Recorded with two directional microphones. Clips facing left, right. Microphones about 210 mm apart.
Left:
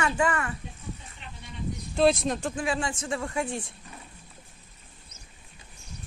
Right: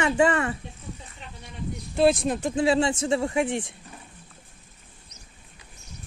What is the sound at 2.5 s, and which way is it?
Speech, 25° right (ahead or behind).